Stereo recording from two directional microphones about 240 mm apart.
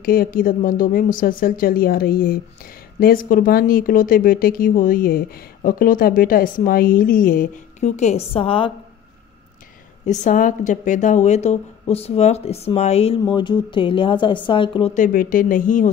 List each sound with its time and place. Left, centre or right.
0.0 s a woman's voice: left
10.0 s a woman's voice: left
15.0 s a woman's voice: left